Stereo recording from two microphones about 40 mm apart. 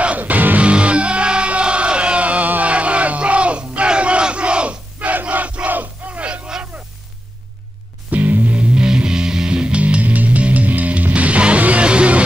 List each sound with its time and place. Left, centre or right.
0.0 s music: right
0.6 s music: right
5.3 s battle cry: right
8.1 s music: right
8.5 s music: right